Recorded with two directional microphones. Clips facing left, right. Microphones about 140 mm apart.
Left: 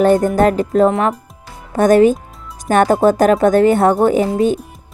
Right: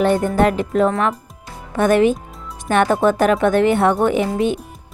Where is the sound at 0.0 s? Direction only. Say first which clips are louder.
Left 4 dB; 40° left (ahead or behind).